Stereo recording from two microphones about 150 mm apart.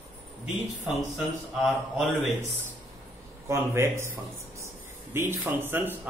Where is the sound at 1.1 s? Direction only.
Centre (ahead or behind).